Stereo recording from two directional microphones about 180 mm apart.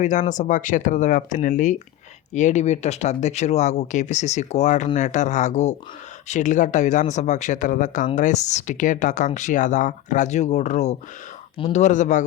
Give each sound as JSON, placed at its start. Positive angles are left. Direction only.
{"t": 0.0, "sound": "speech", "side_deg": 45}